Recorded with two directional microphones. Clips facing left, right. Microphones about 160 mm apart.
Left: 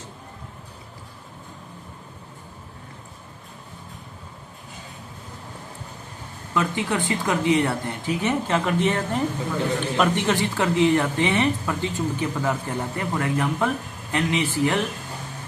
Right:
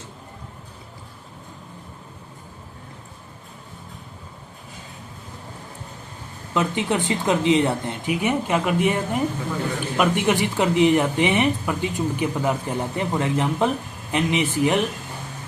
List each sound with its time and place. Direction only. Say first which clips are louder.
6.5 s speech: right 2 dB; 20° right (ahead or behind)